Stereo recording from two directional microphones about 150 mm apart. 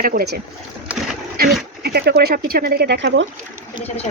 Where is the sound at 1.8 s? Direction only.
90° right.